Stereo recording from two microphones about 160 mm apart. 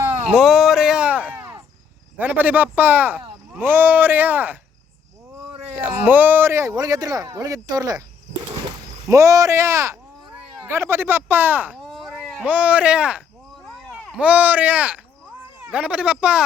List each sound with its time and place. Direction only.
0.3 s a sound: 5° right (ahead or behind)
2.1 s speech: 10° right (ahead or behind)
5.7 s speech: 10° right (ahead or behind)
9.0 s speech: 20° right (ahead or behind)
11.8 s a sound: centre (ahead or behind)
14.2 s speech: 10° right (ahead or behind)